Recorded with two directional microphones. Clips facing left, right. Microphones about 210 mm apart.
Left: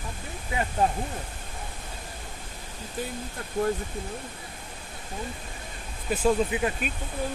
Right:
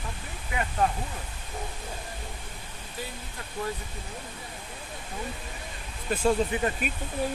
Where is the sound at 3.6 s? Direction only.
50° left (ahead or behind).